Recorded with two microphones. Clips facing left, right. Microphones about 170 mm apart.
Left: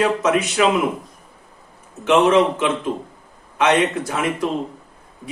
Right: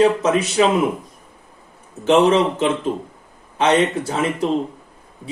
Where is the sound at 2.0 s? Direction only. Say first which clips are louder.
Even; 30° right (ahead or behind).